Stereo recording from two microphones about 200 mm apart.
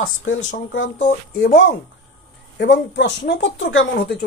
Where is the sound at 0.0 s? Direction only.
80° left.